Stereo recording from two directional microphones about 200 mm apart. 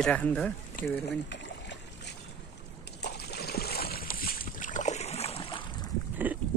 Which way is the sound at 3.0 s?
55° left (ahead or behind).